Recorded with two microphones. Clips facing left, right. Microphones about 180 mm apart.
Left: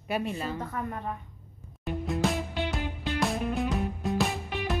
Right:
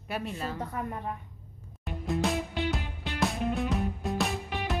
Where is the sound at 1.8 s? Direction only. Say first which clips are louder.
Left 1 dB; centre (ahead or behind).